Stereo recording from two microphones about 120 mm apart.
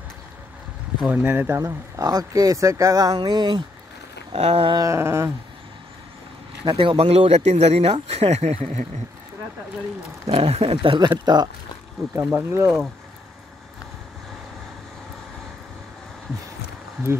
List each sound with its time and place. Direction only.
1.0 s speech: 10° right (ahead or behind)
1.6 s speech: 30° right (ahead or behind)
4.3 s speech: 55° right (ahead or behind)
4.7 s a sound: 25° right (ahead or behind)
6.6 s speech: 45° right (ahead or behind); by 8.8 s 65° right (ahead or behind)
10.2 s speech: 55° right (ahead or behind); by 11.4 s 35° right (ahead or behind)
12.2 s a sound: 20° right (ahead or behind)